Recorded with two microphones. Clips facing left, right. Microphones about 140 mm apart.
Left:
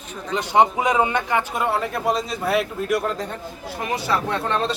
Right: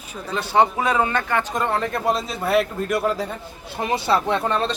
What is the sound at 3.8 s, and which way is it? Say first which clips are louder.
Speech: right 3 dB; 30° right (ahead or behind).